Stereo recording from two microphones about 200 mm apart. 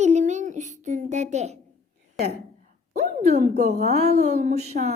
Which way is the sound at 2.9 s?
35° right (ahead or behind).